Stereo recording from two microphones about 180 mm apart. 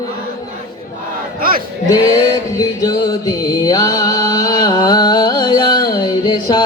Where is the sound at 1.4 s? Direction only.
50° right (ahead or behind).